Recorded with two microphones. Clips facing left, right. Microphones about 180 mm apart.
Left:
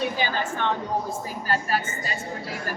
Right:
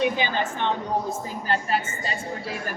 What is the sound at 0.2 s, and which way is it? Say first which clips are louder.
Speech: right 1 dB; 20° right (ahead or behind).